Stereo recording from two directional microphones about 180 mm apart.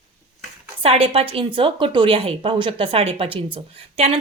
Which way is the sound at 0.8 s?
30° right (ahead or behind).